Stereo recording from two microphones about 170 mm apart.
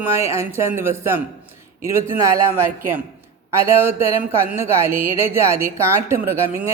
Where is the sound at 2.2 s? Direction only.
15° right (ahead or behind).